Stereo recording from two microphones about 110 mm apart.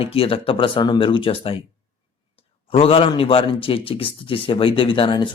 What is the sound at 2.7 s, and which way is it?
A man's voice, 55° left (ahead or behind).